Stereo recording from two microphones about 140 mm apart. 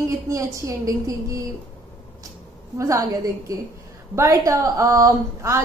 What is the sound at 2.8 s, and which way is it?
Speech, 20° right (ahead or behind).